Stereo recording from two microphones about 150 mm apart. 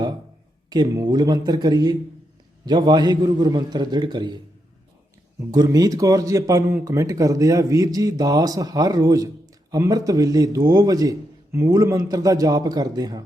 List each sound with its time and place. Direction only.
0.7 s speech: 25° right (ahead or behind)
5.5 s speech: 25° right (ahead or behind)